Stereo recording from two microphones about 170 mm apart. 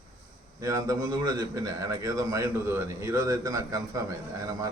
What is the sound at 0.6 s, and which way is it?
A man's voice, 20° right (ahead or behind).